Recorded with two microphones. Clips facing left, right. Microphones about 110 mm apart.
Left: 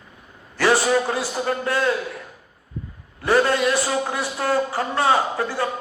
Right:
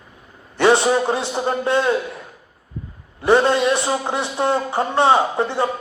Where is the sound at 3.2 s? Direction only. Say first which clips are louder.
Right 3 dB; 25° right (ahead or behind).